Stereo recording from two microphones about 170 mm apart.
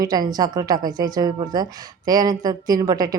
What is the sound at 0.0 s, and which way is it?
Speech, 20° right (ahead or behind).